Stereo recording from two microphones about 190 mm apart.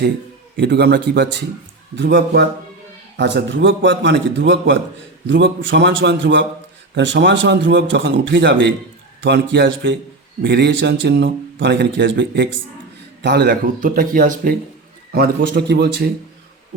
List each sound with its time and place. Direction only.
0.5 s a man's voice: 65° right (ahead or behind)